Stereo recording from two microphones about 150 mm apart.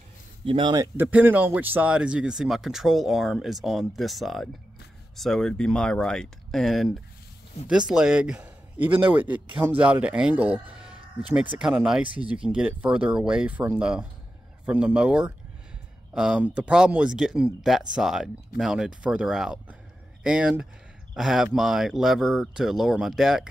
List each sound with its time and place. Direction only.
0.5 s speech: 30° right (ahead or behind)
0.9 s a man's voice: 15° right (ahead or behind)